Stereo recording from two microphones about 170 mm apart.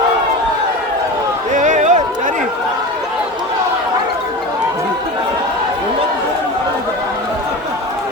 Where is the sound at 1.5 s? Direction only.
45° right (ahead or behind).